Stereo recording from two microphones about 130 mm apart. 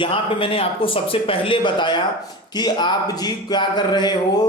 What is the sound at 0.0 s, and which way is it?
A man's voice, 45° left (ahead or behind).